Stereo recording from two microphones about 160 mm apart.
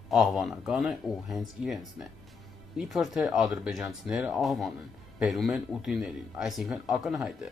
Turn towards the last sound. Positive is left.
turn(degrees=0)  # may be behind; listen again after turning